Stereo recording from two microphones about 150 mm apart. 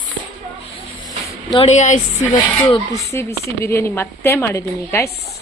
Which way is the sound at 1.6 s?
50° left (ahead or behind).